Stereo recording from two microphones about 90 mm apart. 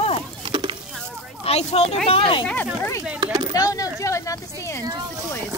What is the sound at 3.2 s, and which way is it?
Speech, 60° right (ahead or behind).